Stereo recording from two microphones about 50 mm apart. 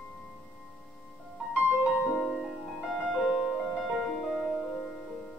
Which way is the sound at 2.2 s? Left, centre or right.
Centre.